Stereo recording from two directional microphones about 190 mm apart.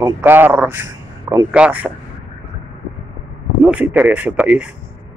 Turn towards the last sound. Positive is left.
turn(degrees=-5)  # may be behind; listen again after turning